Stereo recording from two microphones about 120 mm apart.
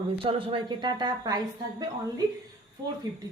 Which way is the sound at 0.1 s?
45° right (ahead or behind).